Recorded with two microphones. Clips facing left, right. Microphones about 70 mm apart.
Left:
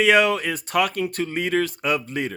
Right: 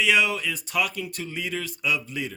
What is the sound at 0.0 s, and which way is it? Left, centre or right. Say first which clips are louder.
Speech: left 5 dB; left.